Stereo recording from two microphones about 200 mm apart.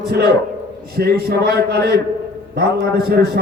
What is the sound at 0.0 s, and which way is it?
A man's voice, 50° right (ahead or behind).